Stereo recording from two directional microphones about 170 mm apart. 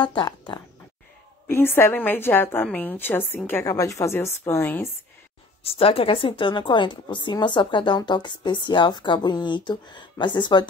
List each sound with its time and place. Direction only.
0.0 s a woman's voice: 25° left (ahead or behind)
1.5 s a woman's voice: 15° left (ahead or behind)
5.6 s a woman's voice: 35° left (ahead or behind)